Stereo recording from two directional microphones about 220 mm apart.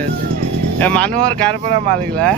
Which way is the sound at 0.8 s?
5° left (ahead or behind).